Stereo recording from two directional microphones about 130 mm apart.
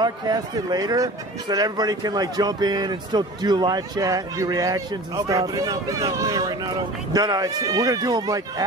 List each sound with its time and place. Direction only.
0.0 s a man's voice: 30° right (ahead or behind)